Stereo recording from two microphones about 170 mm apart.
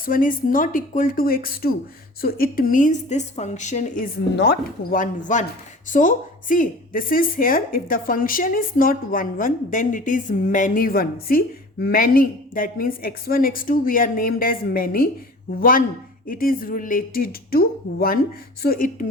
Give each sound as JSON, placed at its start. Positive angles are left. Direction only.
{"t": 0.0, "sound": "a woman's voice", "side_deg": 55}
{"t": 16.2, "sound": "speech", "side_deg": 55}